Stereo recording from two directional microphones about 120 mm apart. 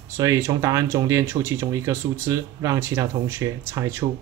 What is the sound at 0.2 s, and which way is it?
Speech, 25° right (ahead or behind).